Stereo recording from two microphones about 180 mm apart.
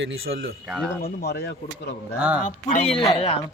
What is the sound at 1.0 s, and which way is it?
Speech, 65° left (ahead or behind).